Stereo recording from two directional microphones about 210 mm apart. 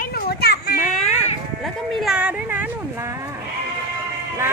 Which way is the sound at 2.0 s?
5° right (ahead or behind).